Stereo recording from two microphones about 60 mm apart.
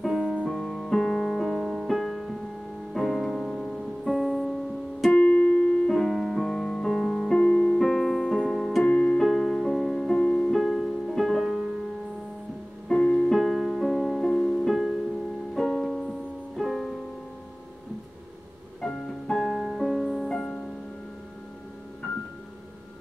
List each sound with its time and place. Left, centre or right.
0.2 s music: centre
0.5 s music: centre
5.1 s keyboard: left
5.9 s music: centre
7.3 s music: centre
7.8 s music: centre
8.8 s music: centre
9.2 s music: centre
10.1 s music: centre
10.5 s music: centre
12.8 s music: centre
18.8 s music: centre